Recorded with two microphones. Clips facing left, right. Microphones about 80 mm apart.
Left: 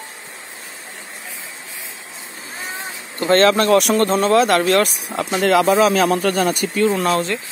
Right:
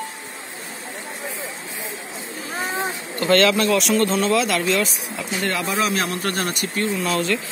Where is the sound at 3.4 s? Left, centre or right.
Left.